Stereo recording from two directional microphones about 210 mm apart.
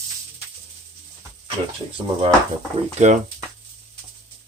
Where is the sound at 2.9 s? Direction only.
35° right (ahead or behind).